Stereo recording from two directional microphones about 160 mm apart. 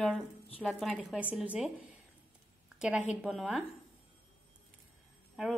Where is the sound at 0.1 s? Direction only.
5° right (ahead or behind).